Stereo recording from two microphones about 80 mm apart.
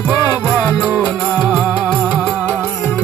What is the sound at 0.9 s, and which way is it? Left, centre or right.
Music, centre.